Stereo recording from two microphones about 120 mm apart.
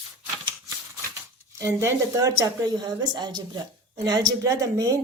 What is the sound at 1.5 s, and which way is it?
A woman's voice, 25° right (ahead or behind).